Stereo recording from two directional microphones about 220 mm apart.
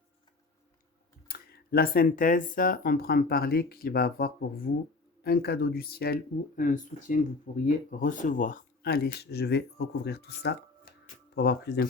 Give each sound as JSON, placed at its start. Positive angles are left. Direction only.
{"t": 1.3, "sound": "speech", "side_deg": 45}